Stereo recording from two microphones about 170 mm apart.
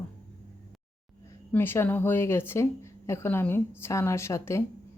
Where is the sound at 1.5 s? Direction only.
15° left (ahead or behind).